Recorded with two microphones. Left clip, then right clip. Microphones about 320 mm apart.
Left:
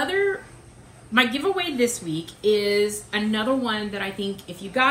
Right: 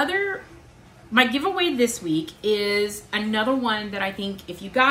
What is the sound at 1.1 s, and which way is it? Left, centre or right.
Speech, centre.